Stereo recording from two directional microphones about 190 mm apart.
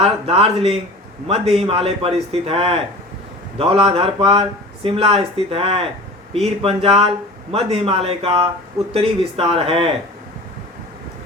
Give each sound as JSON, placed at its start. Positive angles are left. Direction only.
{"t": 0.0, "sound": "a man's voice", "side_deg": -30}